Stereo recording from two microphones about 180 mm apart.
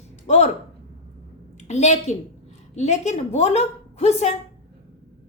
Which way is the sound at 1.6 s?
40° left (ahead or behind).